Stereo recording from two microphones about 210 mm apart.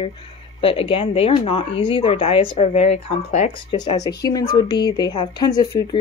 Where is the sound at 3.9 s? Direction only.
20° left (ahead or behind).